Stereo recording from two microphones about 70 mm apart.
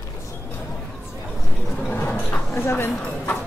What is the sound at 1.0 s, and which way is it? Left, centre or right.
Chatter, centre.